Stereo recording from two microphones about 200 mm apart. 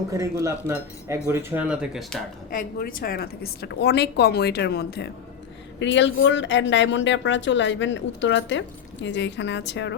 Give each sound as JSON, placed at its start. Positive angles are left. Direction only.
{"t": 0.1, "sound": "speech", "side_deg": -15}
{"t": 2.5, "sound": "a woman's voice", "side_deg": 45}
{"t": 5.8, "sound": "speech", "side_deg": 65}